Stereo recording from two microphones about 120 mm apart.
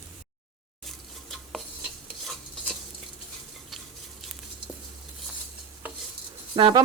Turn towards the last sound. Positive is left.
turn(degrees=-45)  # may be behind; listen again after turning